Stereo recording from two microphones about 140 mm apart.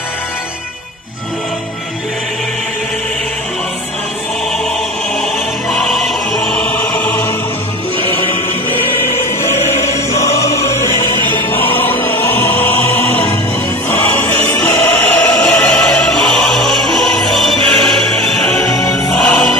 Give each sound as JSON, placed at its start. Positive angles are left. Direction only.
{"t": 5.2, "sound": "music", "side_deg": 5}
{"t": 8.2, "sound": "music", "side_deg": 15}
{"t": 18.7, "sound": "music", "side_deg": 25}
{"t": 19.1, "sound": "music", "side_deg": 5}